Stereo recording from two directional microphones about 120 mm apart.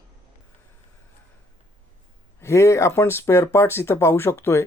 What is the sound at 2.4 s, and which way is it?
Speech, 25° left (ahead or behind).